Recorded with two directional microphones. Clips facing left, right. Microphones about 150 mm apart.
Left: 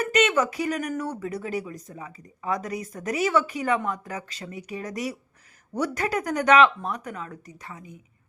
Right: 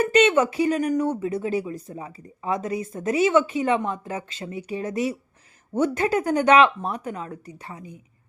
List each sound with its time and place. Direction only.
0.0 s speech: 30° right (ahead or behind)